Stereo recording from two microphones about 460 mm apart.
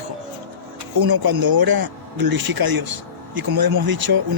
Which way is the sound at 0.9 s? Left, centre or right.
Right.